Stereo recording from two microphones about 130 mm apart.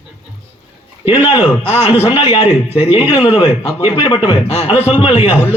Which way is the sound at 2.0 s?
40° left (ahead or behind).